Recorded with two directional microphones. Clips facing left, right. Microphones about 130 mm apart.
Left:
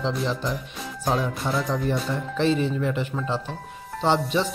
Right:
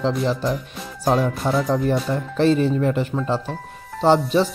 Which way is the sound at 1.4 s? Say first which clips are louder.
Right 5 dB; 40° right (ahead or behind).